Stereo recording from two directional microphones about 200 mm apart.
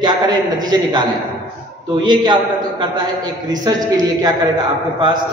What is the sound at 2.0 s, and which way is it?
A man's voice, 20° right (ahead or behind).